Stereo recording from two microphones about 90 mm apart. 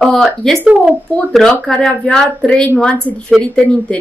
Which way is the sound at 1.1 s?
5° left (ahead or behind).